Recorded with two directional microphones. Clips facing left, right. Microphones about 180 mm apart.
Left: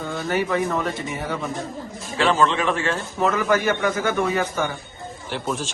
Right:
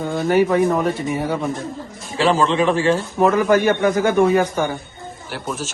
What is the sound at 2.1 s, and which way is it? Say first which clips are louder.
Speech: right 3 dB; 35° right (ahead or behind).